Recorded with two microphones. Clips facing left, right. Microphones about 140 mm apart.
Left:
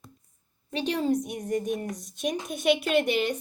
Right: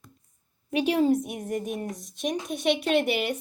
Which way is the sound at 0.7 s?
10° right (ahead or behind).